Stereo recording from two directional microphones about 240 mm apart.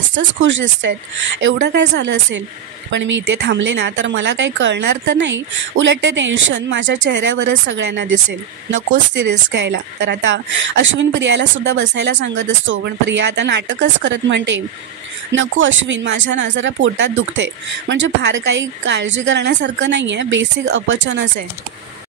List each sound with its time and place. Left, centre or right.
0.1 s a woman's voice: right